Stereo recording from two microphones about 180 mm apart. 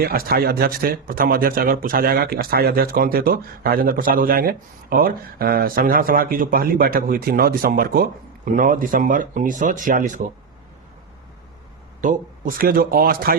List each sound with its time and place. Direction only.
0.0 s speech: 55° right (ahead or behind)
12.0 s speech: 50° right (ahead or behind)